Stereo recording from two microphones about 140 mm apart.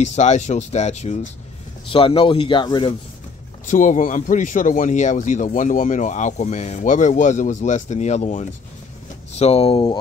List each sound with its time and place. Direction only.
0.0 s speech: 55° left (ahead or behind)
1.9 s a man's voice: 40° left (ahead or behind)
3.6 s speech: 65° left (ahead or behind); by 9.9 s 40° left (ahead or behind)